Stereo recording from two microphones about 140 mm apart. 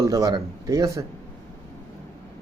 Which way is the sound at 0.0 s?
25° right (ahead or behind).